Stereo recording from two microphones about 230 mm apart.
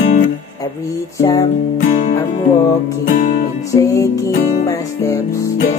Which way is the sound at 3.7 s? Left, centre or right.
Centre.